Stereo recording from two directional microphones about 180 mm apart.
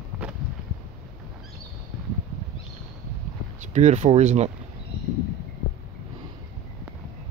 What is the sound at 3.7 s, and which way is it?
Speech, 40° right (ahead or behind).